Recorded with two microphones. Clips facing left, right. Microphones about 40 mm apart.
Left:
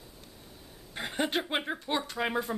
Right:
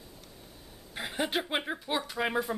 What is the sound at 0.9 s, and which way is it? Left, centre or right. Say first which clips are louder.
A woman's voice: left 1 dB; centre.